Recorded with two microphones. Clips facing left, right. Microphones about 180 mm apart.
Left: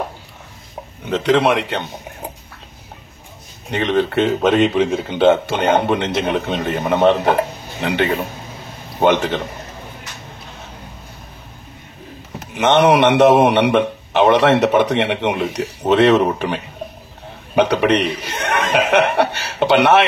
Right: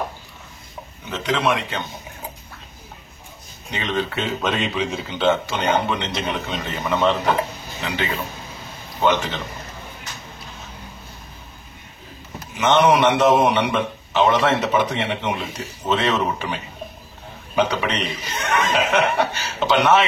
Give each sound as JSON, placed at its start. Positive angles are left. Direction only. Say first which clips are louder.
{"t": 1.0, "sound": "speech", "louder": "left 7 dB", "side_deg": 60}
{"t": 3.7, "sound": "speech", "louder": "left 8 dB", "side_deg": 55}
{"t": 12.4, "sound": "speech", "louder": "left 3 dB", "side_deg": 60}